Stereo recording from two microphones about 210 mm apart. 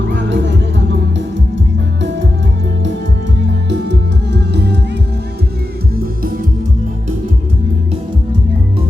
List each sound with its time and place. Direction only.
0.1 s music: 60° right (ahead or behind)
2.0 s music: 55° right (ahead or behind)
3.7 s music: 55° right (ahead or behind)